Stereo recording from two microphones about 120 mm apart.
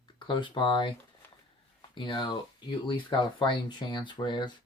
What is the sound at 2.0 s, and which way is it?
Speech, 45° left (ahead or behind).